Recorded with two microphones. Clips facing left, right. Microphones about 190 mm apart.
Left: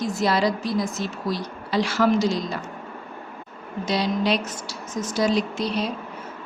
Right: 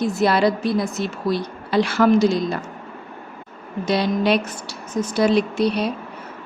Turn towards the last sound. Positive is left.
turn(degrees=-60)  # may be behind; listen again after turning